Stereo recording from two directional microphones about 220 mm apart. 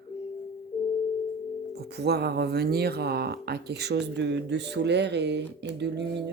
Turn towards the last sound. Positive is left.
turn(degrees=-50)  # may be behind; listen again after turning